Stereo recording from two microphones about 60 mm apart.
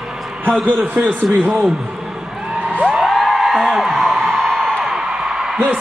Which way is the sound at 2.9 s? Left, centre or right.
Centre.